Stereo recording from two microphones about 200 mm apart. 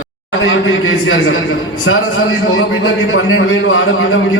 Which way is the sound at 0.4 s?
80° left.